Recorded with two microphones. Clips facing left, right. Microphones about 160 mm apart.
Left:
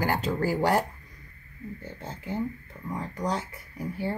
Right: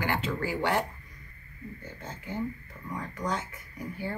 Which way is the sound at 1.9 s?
30° left (ahead or behind).